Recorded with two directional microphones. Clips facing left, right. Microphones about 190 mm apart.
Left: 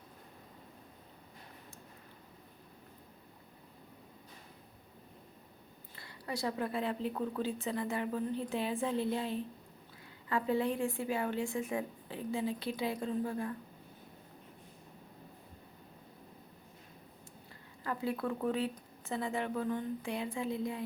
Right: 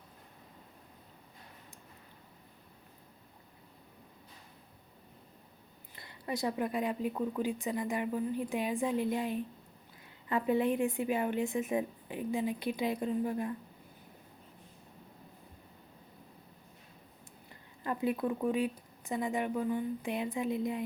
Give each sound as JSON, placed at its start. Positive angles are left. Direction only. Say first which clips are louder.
{"t": 6.0, "sound": "a woman's voice", "louder": "right 3 dB", "side_deg": -20}
{"t": 17.8, "sound": "speech", "louder": "right 3 dB", "side_deg": -20}